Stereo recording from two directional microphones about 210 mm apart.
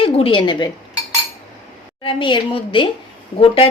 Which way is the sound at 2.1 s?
25° left (ahead or behind).